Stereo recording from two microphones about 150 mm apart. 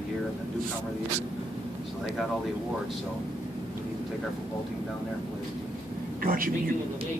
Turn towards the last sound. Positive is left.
turn(degrees=-65)  # may be behind; listen again after turning